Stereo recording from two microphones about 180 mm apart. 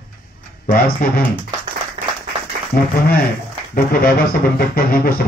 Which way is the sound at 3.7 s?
55° left (ahead or behind).